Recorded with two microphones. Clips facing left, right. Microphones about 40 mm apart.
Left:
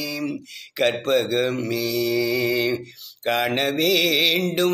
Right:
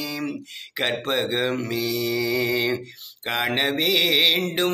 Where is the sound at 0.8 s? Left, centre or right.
Right.